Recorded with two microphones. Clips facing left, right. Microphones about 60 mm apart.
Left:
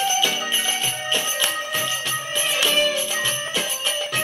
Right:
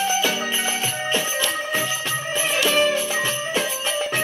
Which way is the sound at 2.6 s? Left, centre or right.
Right.